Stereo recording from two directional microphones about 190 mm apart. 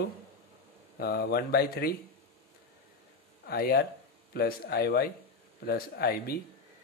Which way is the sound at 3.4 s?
55° left (ahead or behind).